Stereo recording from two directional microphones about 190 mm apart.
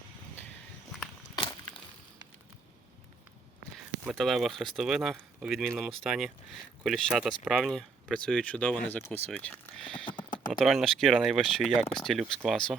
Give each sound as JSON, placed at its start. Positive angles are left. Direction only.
{"t": 1.4, "sound": "a sound", "side_deg": 25}
{"t": 4.0, "sound": "speech", "side_deg": 0}
{"t": 10.1, "sound": "typing", "side_deg": 25}
{"t": 10.3, "sound": "typing", "side_deg": 45}
{"t": 10.6, "sound": "speech", "side_deg": 0}